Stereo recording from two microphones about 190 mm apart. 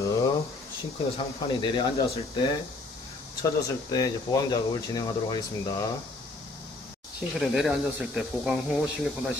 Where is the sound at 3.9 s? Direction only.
20° left (ahead or behind).